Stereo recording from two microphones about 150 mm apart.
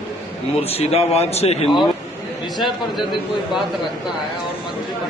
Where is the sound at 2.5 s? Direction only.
Centre (ahead or behind).